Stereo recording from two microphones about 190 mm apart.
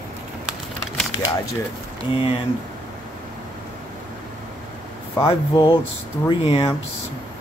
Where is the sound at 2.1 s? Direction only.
30° left (ahead or behind).